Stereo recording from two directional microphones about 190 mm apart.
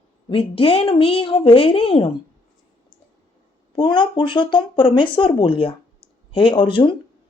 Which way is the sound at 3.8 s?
25° left (ahead or behind).